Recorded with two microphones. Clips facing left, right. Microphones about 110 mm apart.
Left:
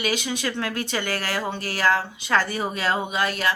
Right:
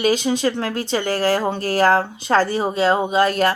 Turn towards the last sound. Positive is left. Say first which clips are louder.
# right 7 dB
turn(degrees=-40)  # may be behind; listen again after turning